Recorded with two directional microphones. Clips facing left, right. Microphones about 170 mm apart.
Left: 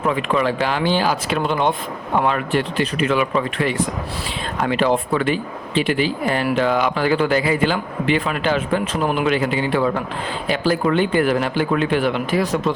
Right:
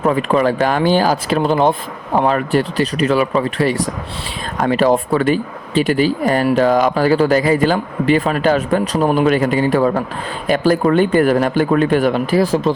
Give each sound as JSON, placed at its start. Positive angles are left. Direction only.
{"t": 0.0, "sound": "speech", "side_deg": -40}